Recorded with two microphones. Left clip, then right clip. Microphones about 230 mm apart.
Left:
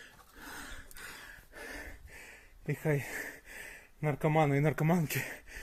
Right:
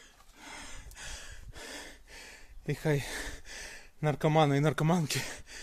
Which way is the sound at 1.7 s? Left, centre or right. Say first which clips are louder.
Right 1 dB; centre.